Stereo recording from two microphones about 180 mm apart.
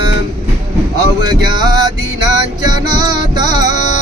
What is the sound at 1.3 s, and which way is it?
Music, 25° right (ahead or behind).